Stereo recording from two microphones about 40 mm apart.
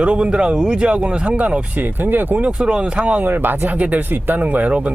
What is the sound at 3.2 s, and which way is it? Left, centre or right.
Speech, right.